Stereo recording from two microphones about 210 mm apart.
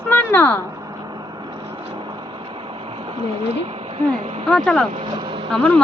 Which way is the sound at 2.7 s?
25° right (ahead or behind).